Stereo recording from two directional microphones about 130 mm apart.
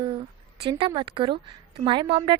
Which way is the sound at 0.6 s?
40° right (ahead or behind).